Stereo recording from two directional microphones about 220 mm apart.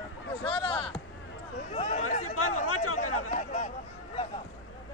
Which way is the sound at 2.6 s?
80° left.